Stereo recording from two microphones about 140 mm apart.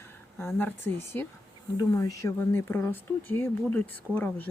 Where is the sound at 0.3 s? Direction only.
15° left (ahead or behind).